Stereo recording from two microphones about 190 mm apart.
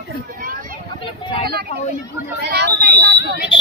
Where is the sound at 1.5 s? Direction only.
60° right (ahead or behind).